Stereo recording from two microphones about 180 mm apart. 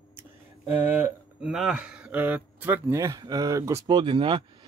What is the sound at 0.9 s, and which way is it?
Speech, 10° right (ahead or behind).